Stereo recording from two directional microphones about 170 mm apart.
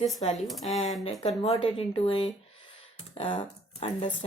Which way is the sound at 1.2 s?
35° left (ahead or behind).